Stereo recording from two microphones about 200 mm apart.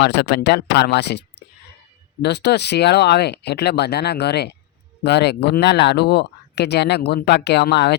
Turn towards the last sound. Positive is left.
turn(degrees=55)  # may be behind; listen again after turning